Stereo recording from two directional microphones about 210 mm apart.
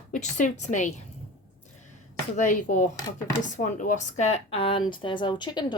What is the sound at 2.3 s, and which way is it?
A woman's voice, 35° left (ahead or behind).